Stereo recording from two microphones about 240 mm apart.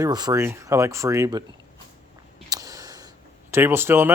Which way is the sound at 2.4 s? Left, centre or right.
Centre.